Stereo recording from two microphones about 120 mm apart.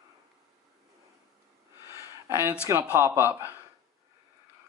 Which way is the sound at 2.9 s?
20° right (ahead or behind).